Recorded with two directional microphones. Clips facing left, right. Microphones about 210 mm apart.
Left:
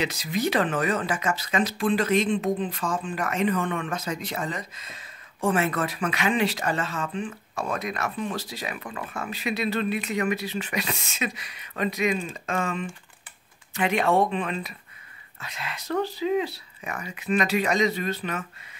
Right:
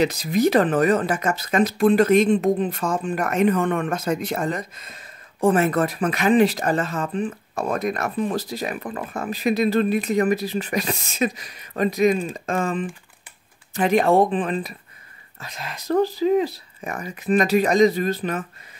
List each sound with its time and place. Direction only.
0.0 s speech: 40° right (ahead or behind)
5.4 s speech: 40° right (ahead or behind)
7.6 s speech: 50° right (ahead or behind)